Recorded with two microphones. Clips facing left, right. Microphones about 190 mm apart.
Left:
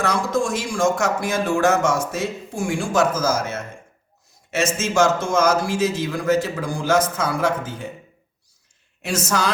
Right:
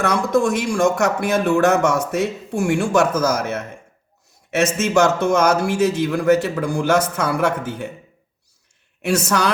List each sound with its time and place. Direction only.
0.0 s speech: 60° right (ahead or behind)
9.0 s speech: 60° right (ahead or behind)